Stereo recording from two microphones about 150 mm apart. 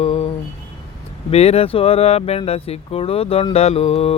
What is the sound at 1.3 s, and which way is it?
Speech, 40° left (ahead or behind).